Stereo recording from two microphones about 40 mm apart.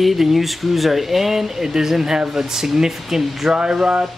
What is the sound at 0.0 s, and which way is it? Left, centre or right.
Speech, centre.